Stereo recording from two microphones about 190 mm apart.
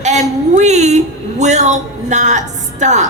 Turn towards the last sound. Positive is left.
turn(degrees=-40)  # may be behind; listen again after turning